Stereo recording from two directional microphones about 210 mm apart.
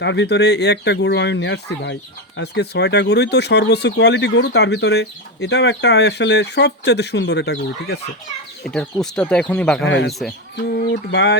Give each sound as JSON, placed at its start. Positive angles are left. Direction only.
{"t": 0.0, "sound": "speech", "side_deg": 55}
{"t": 8.6, "sound": "speech", "side_deg": 0}
{"t": 9.8, "sound": "speech", "side_deg": 60}
{"t": 10.1, "sound": "speech", "side_deg": 0}
{"t": 10.9, "sound": "speech", "side_deg": 60}